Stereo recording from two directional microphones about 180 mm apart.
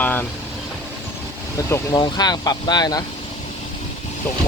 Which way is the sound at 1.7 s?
25° left (ahead or behind).